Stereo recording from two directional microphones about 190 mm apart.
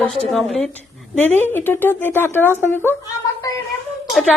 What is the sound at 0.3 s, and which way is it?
A woman's voice, centre (ahead or behind).